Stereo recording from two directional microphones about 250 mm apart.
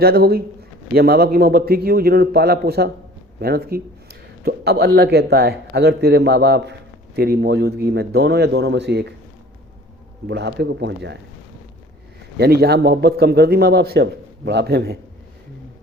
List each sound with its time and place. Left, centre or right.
0.0 s speech: right
10.2 s a man's voice: right
12.4 s speech: right